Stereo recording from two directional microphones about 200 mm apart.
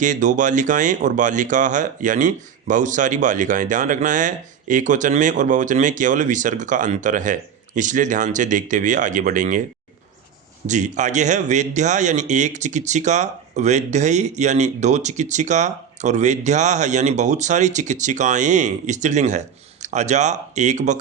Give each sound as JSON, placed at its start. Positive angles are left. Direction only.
{"t": 0.0, "sound": "speech", "side_deg": -40}
{"t": 10.7, "sound": "speech", "side_deg": -35}